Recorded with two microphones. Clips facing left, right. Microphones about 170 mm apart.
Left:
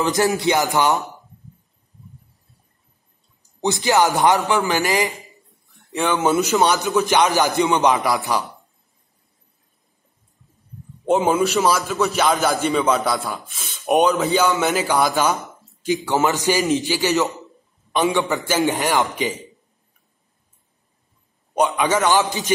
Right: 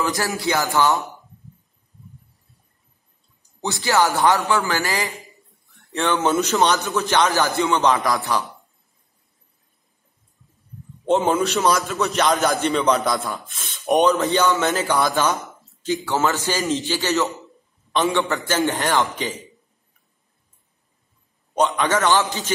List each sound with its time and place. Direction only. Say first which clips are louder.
0.0 s music: left 5 dB; 20° left (ahead or behind)
3.6 s speech: left 2 dB; 20° left (ahead or behind)
6.3 s a man's voice: left 2 dB; centre (ahead or behind)
6.6 s speech: left 2 dB; 15° left (ahead or behind)
11.1 s a man's voice: left 1 dB; centre (ahead or behind)
14.5 s speech: left 1 dB; 15° left (ahead or behind)
21.5 s speech: left 1 dB; 10° left (ahead or behind)